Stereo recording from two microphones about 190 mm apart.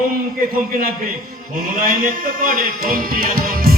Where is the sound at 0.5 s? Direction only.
50° right (ahead or behind).